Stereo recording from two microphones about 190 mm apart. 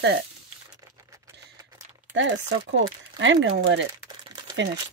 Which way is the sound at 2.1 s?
70° right (ahead or behind).